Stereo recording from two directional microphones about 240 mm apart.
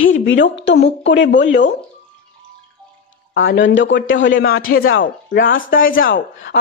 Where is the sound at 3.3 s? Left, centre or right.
Left.